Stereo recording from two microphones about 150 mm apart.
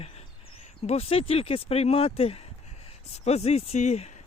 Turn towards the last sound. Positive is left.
turn(degrees=50)  # may be behind; listen again after turning